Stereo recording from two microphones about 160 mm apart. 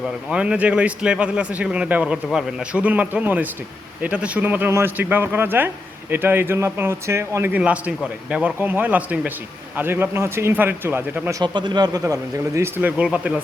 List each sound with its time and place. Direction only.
0.3 s speech: 5° right (ahead or behind)